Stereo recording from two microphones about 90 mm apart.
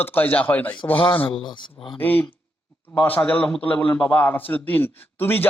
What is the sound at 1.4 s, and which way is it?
Speech, 60° left (ahead or behind).